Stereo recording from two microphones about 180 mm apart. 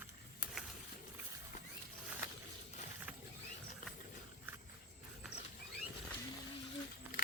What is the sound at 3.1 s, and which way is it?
Vehicle, 5° right (ahead or behind).